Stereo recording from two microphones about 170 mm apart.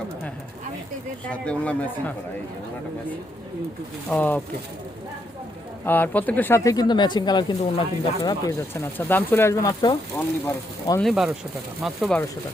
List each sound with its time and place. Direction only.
1.3 s speech: 5° left (ahead or behind)
4.1 s speech: 10° left (ahead or behind)
5.8 s speech: 10° left (ahead or behind)
11.0 s speech: centre (ahead or behind)